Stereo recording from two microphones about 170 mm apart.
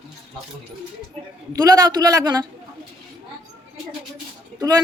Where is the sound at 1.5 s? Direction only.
20° right (ahead or behind).